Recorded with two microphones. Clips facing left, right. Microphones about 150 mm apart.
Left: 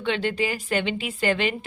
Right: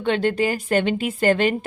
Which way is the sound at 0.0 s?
45° right (ahead or behind).